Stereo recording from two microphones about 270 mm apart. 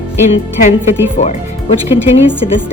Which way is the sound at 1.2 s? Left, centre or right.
Left.